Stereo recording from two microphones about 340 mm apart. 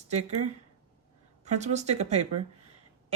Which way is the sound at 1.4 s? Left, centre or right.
Centre.